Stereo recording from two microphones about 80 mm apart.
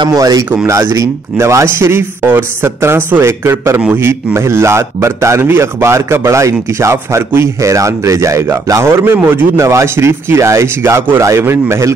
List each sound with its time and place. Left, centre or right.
0.1 s a man's voice: right
9.0 s a man's voice: right